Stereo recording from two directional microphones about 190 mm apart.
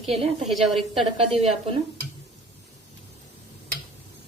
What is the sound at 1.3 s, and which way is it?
Speech, 30° right (ahead or behind).